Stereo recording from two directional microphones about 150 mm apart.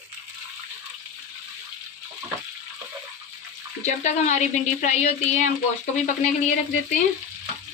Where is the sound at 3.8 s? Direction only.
50° left (ahead or behind).